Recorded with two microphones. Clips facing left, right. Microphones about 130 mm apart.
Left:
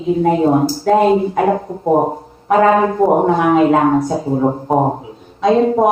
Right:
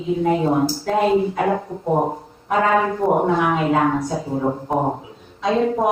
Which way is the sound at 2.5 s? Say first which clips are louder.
Left 6 dB; 45° left (ahead or behind).